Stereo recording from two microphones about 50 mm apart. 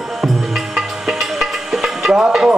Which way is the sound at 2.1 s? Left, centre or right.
Centre.